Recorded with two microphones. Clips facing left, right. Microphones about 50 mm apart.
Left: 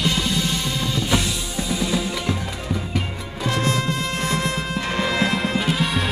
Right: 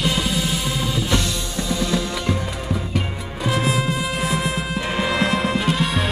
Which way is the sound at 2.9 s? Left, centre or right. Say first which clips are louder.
Right 1 dB; centre.